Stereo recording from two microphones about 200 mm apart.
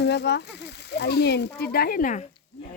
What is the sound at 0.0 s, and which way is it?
Speech, 60° left (ahead or behind).